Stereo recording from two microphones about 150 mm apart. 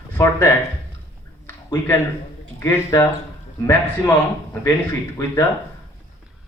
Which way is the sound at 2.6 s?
15° left (ahead or behind).